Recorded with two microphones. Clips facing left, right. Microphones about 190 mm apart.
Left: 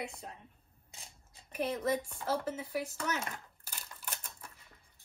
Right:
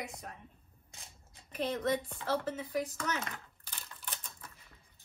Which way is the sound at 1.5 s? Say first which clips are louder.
Even; 10° left (ahead or behind).